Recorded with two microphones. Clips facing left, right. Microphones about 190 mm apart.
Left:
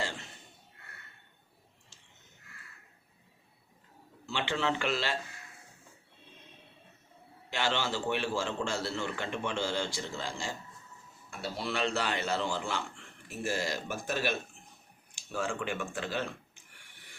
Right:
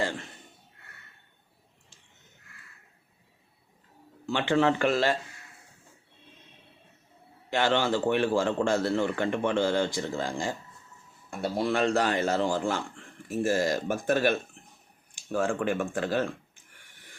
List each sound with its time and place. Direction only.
4.3 s a man's voice: 50° right (ahead or behind)
7.5 s a man's voice: 55° right (ahead or behind)